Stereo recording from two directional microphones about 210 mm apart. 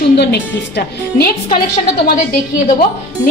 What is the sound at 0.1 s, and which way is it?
A woman's voice, 50° left (ahead or behind).